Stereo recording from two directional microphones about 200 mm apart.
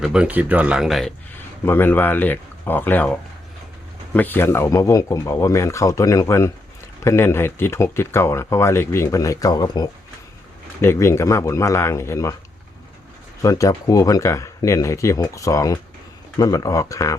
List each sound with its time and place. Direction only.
0.0 s speech: 5° right (ahead or behind)
1.6 s speech: 10° left (ahead or behind)
13.4 s speech: 15° left (ahead or behind)